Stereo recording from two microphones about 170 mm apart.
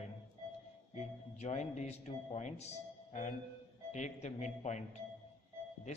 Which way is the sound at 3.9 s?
45° left (ahead or behind).